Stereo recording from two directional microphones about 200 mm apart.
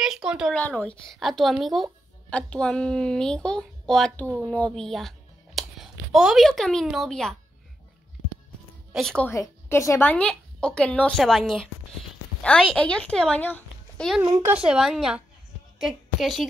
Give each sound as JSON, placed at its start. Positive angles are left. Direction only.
{"t": 0.0, "sound": "speech", "side_deg": -5}
{"t": 0.6, "sound": "speech", "side_deg": 5}
{"t": 8.9, "sound": "a woman's voice", "side_deg": 5}
{"t": 14.2, "sound": "speech", "side_deg": -20}
{"t": 14.6, "sound": "a woman's voice", "side_deg": -5}